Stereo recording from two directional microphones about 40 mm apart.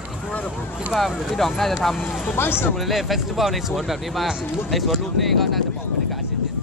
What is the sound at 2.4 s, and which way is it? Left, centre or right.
Speech, left.